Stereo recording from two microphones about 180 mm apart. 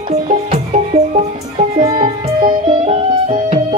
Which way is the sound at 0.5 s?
40° right (ahead or behind).